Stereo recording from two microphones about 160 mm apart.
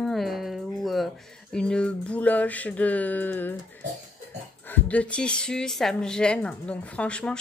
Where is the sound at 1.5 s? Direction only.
5° left (ahead or behind).